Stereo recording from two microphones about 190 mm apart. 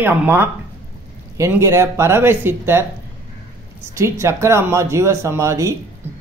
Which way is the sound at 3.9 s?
15° right (ahead or behind).